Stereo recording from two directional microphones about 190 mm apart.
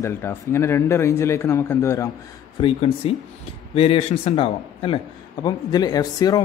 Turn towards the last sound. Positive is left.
turn(degrees=20)  # may be behind; listen again after turning